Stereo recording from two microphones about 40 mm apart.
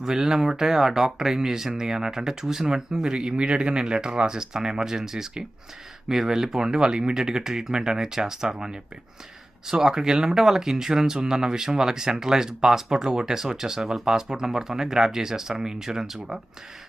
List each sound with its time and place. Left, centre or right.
0.0 s speech: centre